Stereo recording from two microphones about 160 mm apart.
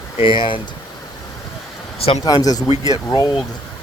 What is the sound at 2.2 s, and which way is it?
Speech, 25° left (ahead or behind).